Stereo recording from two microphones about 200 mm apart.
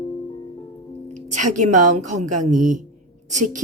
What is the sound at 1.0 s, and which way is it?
A woman's voice, 40° right (ahead or behind).